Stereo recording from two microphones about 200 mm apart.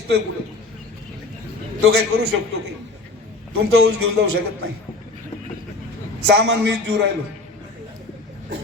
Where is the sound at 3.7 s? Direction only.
55° right (ahead or behind).